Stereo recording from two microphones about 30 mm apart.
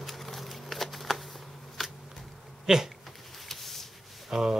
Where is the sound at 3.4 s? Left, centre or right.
Centre.